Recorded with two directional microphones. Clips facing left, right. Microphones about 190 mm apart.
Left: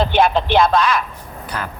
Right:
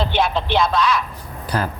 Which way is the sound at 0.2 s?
50° left (ahead or behind).